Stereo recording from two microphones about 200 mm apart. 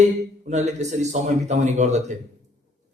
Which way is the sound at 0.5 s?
35° right (ahead or behind).